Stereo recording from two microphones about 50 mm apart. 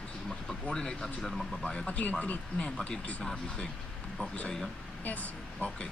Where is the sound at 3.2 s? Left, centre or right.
Centre.